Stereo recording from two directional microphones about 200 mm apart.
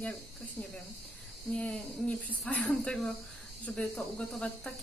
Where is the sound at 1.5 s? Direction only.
5° left (ahead or behind).